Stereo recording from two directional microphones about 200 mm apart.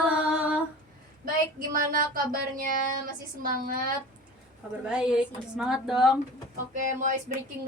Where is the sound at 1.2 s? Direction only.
45° right (ahead or behind).